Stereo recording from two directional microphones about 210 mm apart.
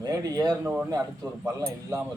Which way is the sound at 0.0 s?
15° right (ahead or behind).